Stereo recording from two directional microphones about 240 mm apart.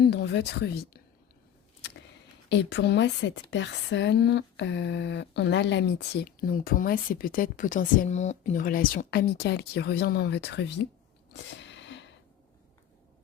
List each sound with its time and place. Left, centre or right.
0.0 s speech: left
2.5 s speech: left
11.4 s a sound: left